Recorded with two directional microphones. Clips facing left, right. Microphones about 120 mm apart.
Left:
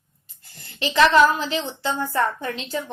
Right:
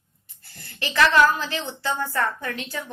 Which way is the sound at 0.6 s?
15° left (ahead or behind).